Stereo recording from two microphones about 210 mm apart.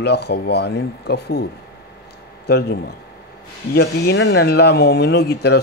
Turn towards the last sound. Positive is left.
turn(degrees=50)  # may be behind; listen again after turning